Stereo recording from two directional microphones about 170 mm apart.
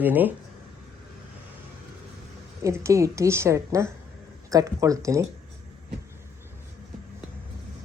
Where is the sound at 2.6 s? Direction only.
15° right (ahead or behind).